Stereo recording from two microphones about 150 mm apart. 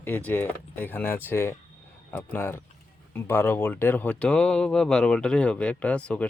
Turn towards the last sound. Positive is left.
turn(degrees=10)  # may be behind; listen again after turning